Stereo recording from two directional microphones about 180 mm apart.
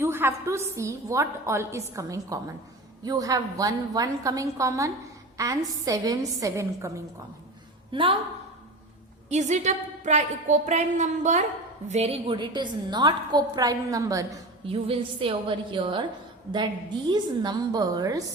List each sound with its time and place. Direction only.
0.0 s a woman's voice: 15° right (ahead or behind)
7.9 s a woman's voice: 30° right (ahead or behind)
9.3 s a woman's voice: 40° right (ahead or behind); by 14.3 s 20° right (ahead or behind)
14.7 s a woman's voice: 30° right (ahead or behind)
17.1 s a woman's voice: 25° right (ahead or behind)